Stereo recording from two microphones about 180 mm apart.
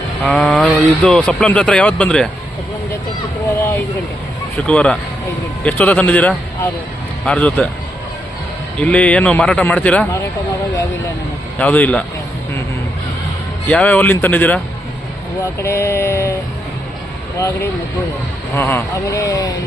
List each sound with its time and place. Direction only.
0.3 s speech: 5° left (ahead or behind)
4.5 s a man's voice: 5° left (ahead or behind)
8.8 s a man's voice: 5° left (ahead or behind)
11.5 s a man's voice: 10° left (ahead or behind)
13.7 s a man's voice: 10° left (ahead or behind)
15.6 s a man's voice: 15° left (ahead or behind)
17.3 s a man's voice: 20° left (ahead or behind)